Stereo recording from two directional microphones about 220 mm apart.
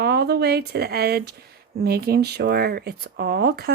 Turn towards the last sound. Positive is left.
turn(degrees=-45)  # may be behind; listen again after turning